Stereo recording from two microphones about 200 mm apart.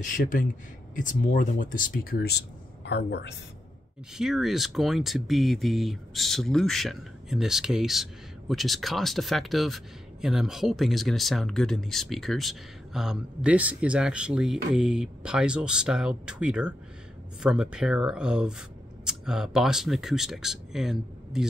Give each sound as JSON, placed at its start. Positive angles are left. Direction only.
{"t": 0.0, "sound": "speech", "side_deg": 40}
{"t": 4.1, "sound": "speech", "side_deg": 0}